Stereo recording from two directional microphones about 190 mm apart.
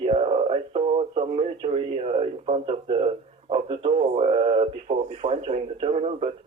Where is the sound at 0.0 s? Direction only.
35° right (ahead or behind).